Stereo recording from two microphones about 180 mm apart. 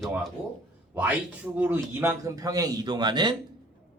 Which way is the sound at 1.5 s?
10° right (ahead or behind).